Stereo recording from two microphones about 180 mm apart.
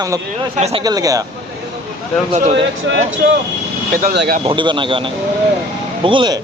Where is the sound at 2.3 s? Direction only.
35° right (ahead or behind).